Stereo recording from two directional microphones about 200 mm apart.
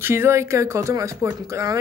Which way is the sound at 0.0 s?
10° right (ahead or behind).